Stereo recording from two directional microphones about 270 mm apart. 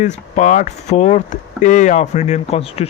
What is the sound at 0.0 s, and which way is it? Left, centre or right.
Speech, left.